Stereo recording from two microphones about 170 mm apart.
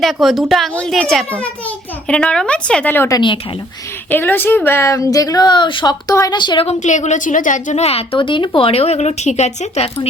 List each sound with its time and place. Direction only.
0.0 s a child's voice: centre (ahead or behind); by 6.7 s 25° left (ahead or behind)
6.7 s a woman's voice: 45° left (ahead or behind)